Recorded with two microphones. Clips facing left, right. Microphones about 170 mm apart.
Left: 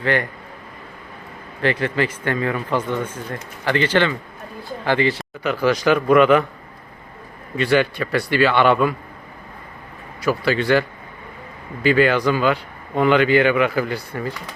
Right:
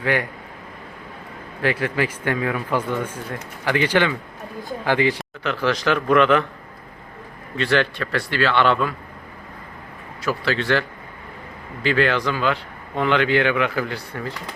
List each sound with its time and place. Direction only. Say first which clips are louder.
0.0 s speech: left 1 dB; 10° right (ahead or behind)
1.6 s speech: left 2 dB; 10° right (ahead or behind)
5.4 s a man's voice: left 5 dB; 10° left (ahead or behind)
7.5 s a man's voice: left 3 dB; 10° left (ahead or behind)
10.2 s a man's voice: left 4 dB; 10° left (ahead or behind)